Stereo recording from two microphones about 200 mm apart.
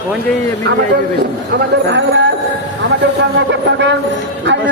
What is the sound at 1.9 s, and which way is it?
Speech, 65° right (ahead or behind).